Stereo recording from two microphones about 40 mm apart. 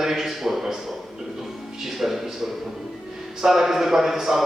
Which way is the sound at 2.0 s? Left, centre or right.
Centre.